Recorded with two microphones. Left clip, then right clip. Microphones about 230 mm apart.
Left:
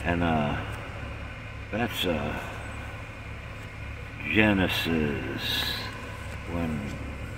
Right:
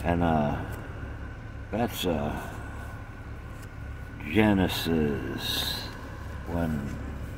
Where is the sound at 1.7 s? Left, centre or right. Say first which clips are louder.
Left 1 dB; centre.